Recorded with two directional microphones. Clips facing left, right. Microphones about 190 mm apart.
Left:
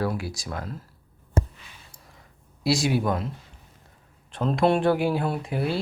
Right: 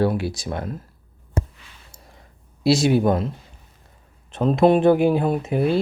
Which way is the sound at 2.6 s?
25° right (ahead or behind).